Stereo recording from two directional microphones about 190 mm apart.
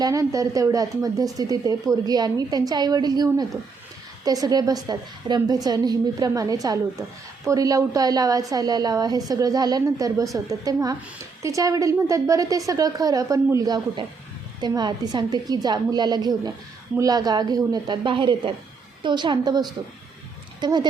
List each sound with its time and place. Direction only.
0.0 s a woman's voice: 15° right (ahead or behind)